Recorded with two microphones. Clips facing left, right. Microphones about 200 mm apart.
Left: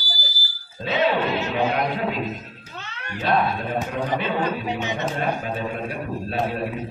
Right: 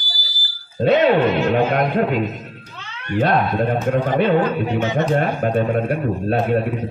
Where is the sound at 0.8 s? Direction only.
60° right (ahead or behind).